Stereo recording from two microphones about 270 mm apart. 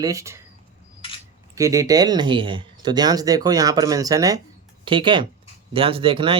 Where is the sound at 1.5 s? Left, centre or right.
Centre.